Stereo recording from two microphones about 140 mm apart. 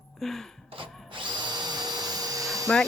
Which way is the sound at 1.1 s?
35° right (ahead or behind).